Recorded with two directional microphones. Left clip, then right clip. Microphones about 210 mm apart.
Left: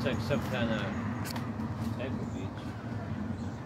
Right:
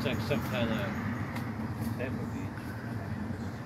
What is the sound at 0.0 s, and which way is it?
Speech, 45° left (ahead or behind).